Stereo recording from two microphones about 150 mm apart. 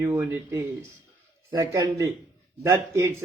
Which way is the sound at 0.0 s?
20° right (ahead or behind).